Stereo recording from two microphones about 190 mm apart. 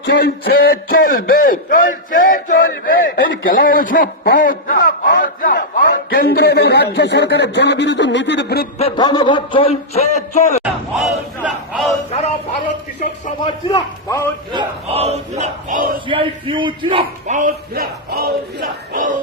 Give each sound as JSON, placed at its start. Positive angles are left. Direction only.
{"t": 0.0, "sound": "a man's voice", "side_deg": 55}
{"t": 8.8, "sound": "a man's voice", "side_deg": 20}
{"t": 10.6, "sound": "crowd", "side_deg": -5}
{"t": 13.4, "sound": "a man's voice", "side_deg": 20}
{"t": 14.5, "sound": "battle cry", "side_deg": -25}
{"t": 16.0, "sound": "a man's voice", "side_deg": -25}